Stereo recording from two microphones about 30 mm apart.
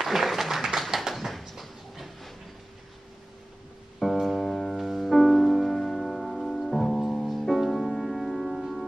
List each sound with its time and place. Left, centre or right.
0.0 s a sound: centre
1.1 s door: centre
4.0 s music: centre
5.7 s music: centre
6.9 s music: centre
7.2 s music: centre